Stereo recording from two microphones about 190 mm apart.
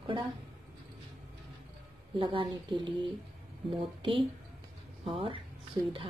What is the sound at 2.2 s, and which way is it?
Speech, 25° right (ahead or behind).